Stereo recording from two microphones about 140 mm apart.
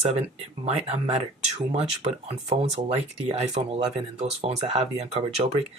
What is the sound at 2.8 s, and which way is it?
Speech, 50° right (ahead or behind).